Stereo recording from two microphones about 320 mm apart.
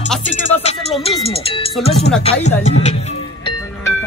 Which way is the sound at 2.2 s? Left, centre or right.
Left.